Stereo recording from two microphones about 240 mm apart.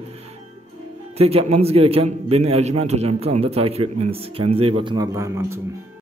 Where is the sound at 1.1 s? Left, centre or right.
Right.